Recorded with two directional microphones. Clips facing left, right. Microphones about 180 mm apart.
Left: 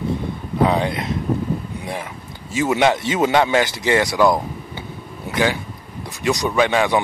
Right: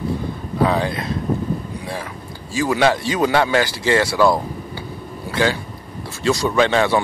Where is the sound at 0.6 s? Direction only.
20° left (ahead or behind).